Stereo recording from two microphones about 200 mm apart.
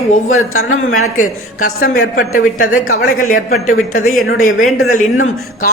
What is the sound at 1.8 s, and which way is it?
Speech, 45° left (ahead or behind).